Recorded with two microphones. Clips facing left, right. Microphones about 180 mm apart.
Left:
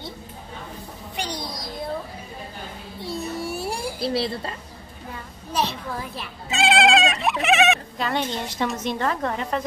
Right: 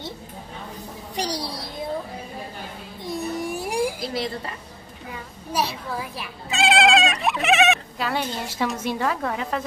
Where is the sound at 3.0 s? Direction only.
15° right (ahead or behind).